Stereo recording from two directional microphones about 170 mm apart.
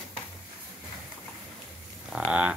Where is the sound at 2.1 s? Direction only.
5° right (ahead or behind).